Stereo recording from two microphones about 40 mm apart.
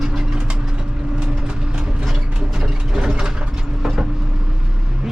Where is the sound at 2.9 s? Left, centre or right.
Centre.